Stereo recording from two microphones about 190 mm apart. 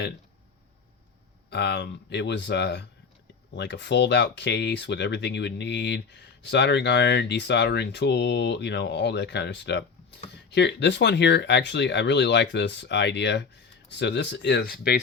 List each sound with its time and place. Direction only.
1.5 s speech: 65° left (ahead or behind)